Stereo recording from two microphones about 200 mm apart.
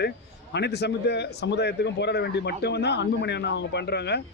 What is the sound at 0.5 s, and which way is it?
A man's voice, 55° left (ahead or behind).